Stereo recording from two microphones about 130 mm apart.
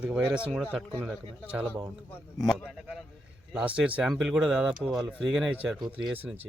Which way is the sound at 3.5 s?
10° right (ahead or behind).